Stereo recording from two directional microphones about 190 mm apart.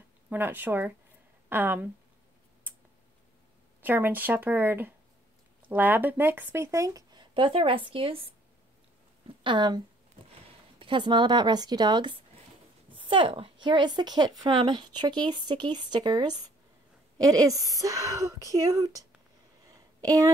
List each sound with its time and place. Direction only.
0.3 s speech: 10° right (ahead or behind)
3.8 s speech: 10° right (ahead or behind); by 8.2 s 30° right (ahead or behind)
9.4 s a woman's voice: 25° right (ahead or behind)
10.8 s a woman's voice: 25° right (ahead or behind)
19.7 s a sound: 20° right (ahead or behind)